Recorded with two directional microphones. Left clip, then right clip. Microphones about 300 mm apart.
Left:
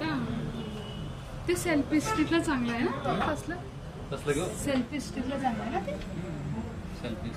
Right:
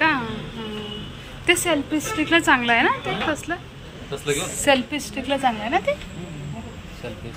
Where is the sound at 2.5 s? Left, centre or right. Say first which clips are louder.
Right 13 dB; centre.